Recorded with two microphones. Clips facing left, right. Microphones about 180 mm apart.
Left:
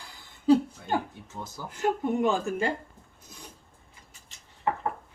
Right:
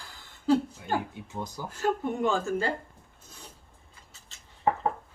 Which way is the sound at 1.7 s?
20° left (ahead or behind).